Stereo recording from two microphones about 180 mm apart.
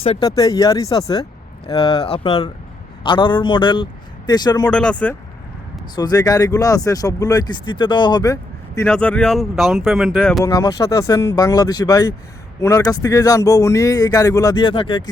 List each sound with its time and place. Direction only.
0.2 s speech: 20° left (ahead or behind)
4.7 s speech: 5° left (ahead or behind)
6.0 s speech: 20° left (ahead or behind)
8.9 s speech: 5° left (ahead or behind)
10.4 s speech: 20° left (ahead or behind)